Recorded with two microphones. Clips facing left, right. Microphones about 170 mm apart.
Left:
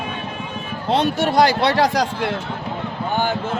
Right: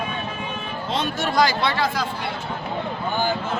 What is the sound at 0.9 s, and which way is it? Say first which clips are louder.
Speech: left 6 dB; 65° left (ahead or behind).